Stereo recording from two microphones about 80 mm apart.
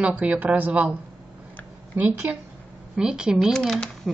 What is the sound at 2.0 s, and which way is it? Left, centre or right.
Speech, right.